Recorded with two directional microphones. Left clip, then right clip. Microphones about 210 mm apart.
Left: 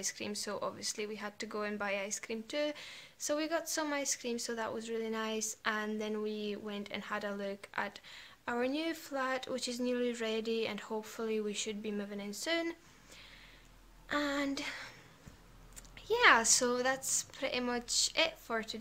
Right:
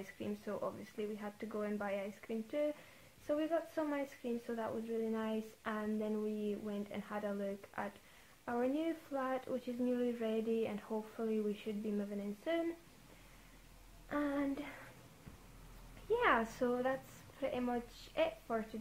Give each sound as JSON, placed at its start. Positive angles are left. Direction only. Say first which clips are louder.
{"t": 0.2, "sound": "speech", "louder": "right 1 dB", "side_deg": 20}
{"t": 14.0, "sound": "speech", "louder": "left 4 dB", "side_deg": 15}
{"t": 16.1, "sound": "speech", "louder": "left 7 dB", "side_deg": 15}